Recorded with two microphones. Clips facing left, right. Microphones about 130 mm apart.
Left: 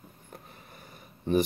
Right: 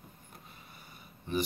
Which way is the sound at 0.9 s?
45° left (ahead or behind).